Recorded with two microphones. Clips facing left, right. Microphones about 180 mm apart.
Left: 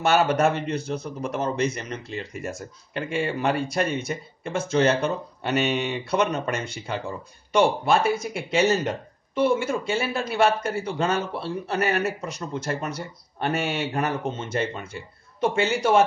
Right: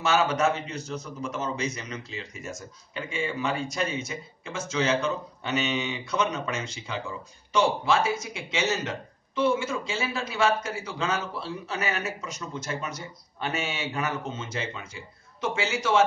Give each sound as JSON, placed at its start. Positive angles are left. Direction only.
{"t": 0.0, "sound": "speech", "side_deg": 60}